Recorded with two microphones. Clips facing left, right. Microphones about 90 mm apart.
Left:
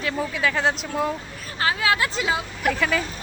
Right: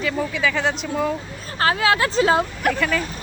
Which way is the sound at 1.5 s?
35° right (ahead or behind).